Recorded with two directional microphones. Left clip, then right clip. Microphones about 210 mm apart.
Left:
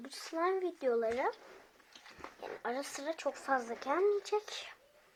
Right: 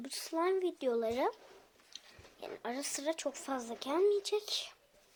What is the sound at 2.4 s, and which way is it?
Speech, 55° right (ahead or behind).